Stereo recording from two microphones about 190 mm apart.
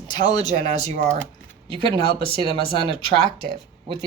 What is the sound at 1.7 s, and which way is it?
Speech, 25° right (ahead or behind).